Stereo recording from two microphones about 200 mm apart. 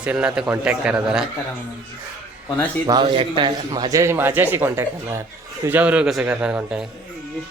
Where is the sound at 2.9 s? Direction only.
25° right (ahead or behind); by 6.8 s 5° right (ahead or behind).